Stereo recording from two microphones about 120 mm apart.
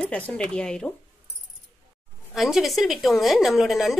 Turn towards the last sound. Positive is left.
turn(degrees=0)  # may be behind; listen again after turning